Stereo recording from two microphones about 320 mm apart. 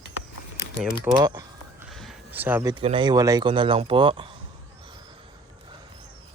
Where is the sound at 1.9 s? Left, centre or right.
Centre.